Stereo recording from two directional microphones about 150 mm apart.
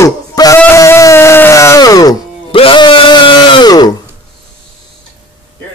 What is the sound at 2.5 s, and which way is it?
Music, 35° left (ahead or behind).